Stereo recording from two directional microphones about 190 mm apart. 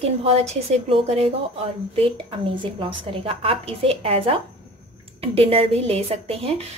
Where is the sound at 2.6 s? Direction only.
25° right (ahead or behind).